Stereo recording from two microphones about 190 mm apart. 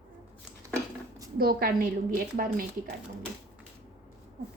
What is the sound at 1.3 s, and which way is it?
A woman's voice, 50° right (ahead or behind).